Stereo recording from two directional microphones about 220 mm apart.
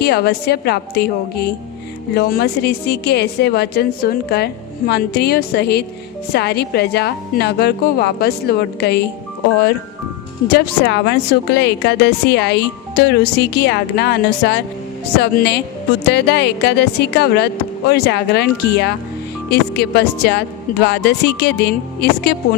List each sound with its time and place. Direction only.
0.0 s a woman's voice: 45° left (ahead or behind)
10.5 s a woman's voice: 50° left (ahead or behind)